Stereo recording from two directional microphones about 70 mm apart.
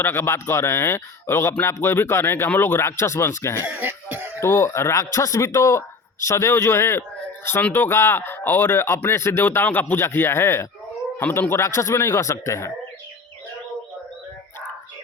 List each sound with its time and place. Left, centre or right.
0.0 s speech: left
3.7 s cough: right
4.4 s speech: left